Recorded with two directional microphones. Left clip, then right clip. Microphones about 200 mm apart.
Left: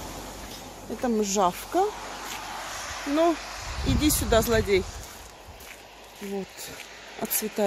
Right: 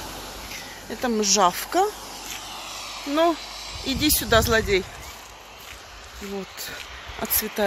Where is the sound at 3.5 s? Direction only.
20° right (ahead or behind).